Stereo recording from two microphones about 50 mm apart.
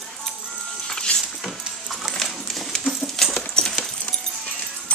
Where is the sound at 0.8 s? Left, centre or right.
Centre.